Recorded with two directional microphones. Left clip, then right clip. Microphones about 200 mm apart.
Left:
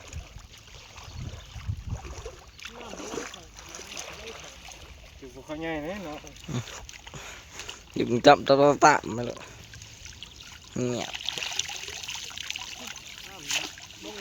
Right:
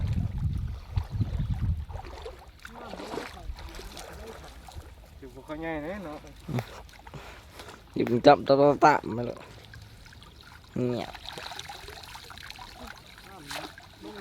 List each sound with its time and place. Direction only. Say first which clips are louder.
2.9 s a sound: even; 30° left (ahead or behind)
4.0 s water: left 3 dB; 55° right (ahead or behind)
5.5 s speech: left 1 dB; 40° left (ahead or behind)
6.5 s speech: right 1 dB; 10° right (ahead or behind)
10.8 s trickle: left 1 dB; 5° right (ahead or behind)
13.4 s boat: left 8 dB; 10° right (ahead or behind)